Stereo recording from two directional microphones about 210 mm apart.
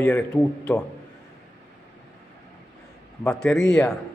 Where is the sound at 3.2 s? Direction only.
5° left (ahead or behind).